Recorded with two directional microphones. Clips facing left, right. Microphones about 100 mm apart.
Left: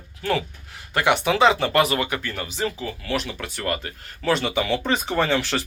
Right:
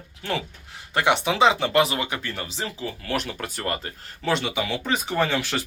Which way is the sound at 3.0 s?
45° right (ahead or behind).